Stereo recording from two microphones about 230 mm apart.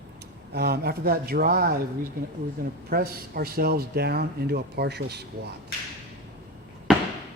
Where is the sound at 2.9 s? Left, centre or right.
Right.